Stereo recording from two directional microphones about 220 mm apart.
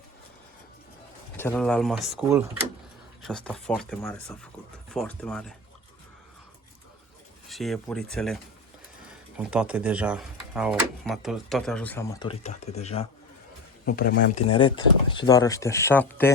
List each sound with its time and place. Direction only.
1.4 s speech: 10° left (ahead or behind)
3.2 s speech: 5° left (ahead or behind)
7.4 s speech: centre (ahead or behind)
9.4 s speech: 5° right (ahead or behind); by 12.3 s 15° left (ahead or behind)
12.3 s speech: 30° left (ahead or behind)
13.8 s speech: 45° left (ahead or behind)
14.3 s speech: 25° left (ahead or behind); by 16.3 s 10° left (ahead or behind)